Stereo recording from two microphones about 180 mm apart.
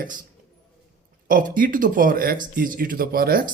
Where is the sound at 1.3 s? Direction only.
50° right (ahead or behind).